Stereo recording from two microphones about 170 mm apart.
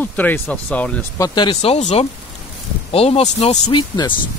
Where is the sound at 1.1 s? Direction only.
20° left (ahead or behind); by 3.8 s 35° left (ahead or behind).